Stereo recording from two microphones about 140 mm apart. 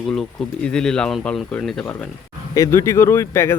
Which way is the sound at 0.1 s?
5° left (ahead or behind).